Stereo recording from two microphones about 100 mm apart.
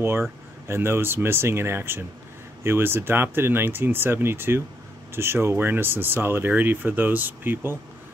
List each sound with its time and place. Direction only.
0.0 s speech: 25° right (ahead or behind)